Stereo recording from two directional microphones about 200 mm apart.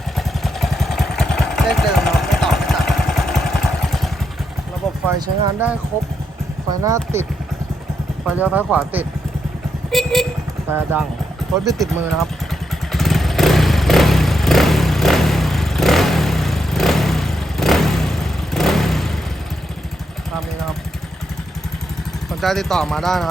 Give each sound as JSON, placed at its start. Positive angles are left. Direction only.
{"t": 0.2, "sound": "vehicle", "side_deg": 0}
{"t": 5.0, "sound": "speech", "side_deg": -10}
{"t": 8.3, "sound": "speech", "side_deg": -5}
{"t": 9.9, "sound": "vehicle", "side_deg": 0}
{"t": 10.7, "sound": "speech", "side_deg": -10}
{"t": 11.7, "sound": "speech", "side_deg": 0}
{"t": 12.9, "sound": "motorcycle", "side_deg": 0}
{"t": 22.3, "sound": "speech", "side_deg": 0}